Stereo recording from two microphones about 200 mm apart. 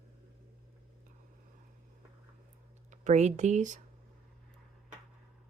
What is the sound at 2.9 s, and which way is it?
Speech, 35° right (ahead or behind).